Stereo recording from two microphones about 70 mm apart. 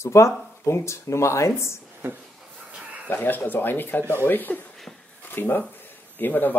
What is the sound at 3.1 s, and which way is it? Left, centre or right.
Speech, left.